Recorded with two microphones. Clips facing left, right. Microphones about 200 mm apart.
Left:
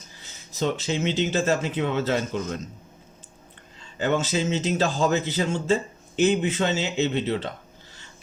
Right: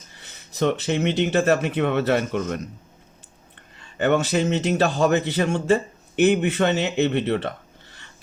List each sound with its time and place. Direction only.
0.2 s a man's voice: 60° right (ahead or behind)
3.8 s a man's voice: 60° right (ahead or behind)